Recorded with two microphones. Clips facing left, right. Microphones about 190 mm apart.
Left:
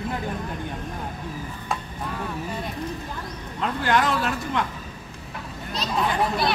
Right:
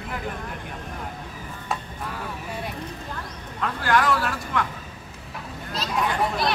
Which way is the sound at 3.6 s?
20° left (ahead or behind).